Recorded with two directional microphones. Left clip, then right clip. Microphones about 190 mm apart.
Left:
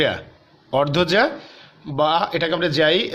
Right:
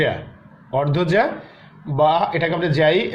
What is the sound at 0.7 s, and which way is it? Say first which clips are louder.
Speech: left 1 dB; 45° left (ahead or behind).